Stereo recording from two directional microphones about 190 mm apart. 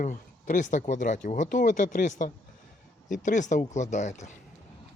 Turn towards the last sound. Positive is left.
turn(degrees=40)  # may be behind; listen again after turning